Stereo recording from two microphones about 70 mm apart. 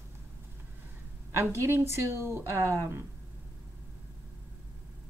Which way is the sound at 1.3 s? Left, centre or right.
Right.